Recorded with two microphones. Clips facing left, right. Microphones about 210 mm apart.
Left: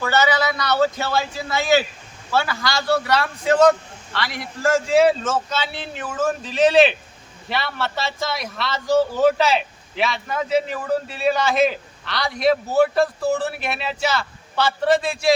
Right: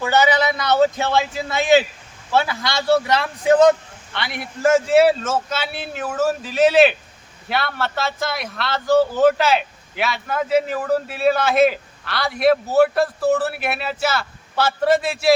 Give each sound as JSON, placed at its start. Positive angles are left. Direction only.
{"t": 0.0, "sound": "a man's voice", "side_deg": -20}
{"t": 4.9, "sound": "a man's voice", "side_deg": -5}